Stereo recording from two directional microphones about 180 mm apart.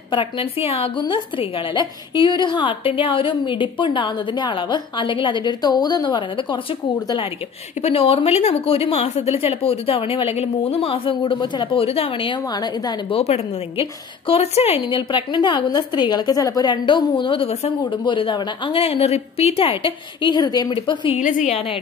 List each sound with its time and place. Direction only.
0.1 s a woman's voice: 30° left (ahead or behind)
7.8 s a woman's voice: 30° left (ahead or behind)
21.2 s a woman's voice: 45° left (ahead or behind)